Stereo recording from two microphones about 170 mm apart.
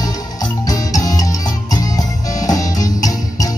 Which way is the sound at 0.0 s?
20° left (ahead or behind).